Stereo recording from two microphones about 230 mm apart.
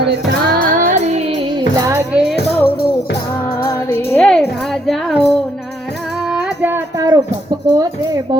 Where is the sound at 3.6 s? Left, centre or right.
Centre.